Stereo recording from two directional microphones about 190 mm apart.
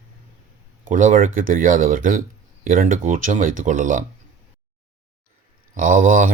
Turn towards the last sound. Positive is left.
turn(degrees=-45)  # may be behind; listen again after turning